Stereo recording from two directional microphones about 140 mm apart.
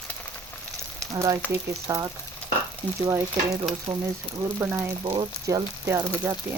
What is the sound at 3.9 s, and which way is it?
Speech, 30° right (ahead or behind).